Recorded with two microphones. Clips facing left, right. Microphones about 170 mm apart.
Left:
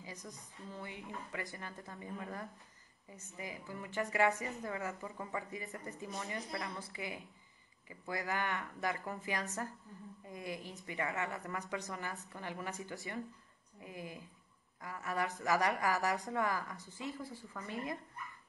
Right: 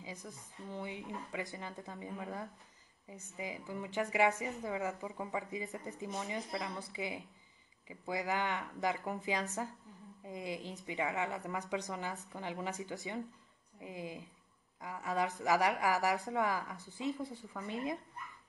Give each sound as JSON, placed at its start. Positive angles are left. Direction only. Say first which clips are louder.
{"t": 0.7, "sound": "a woman's voice", "louder": "right 4 dB", "side_deg": -20}